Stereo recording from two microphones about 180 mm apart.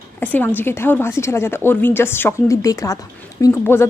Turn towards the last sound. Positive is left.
turn(degrees=15)  # may be behind; listen again after turning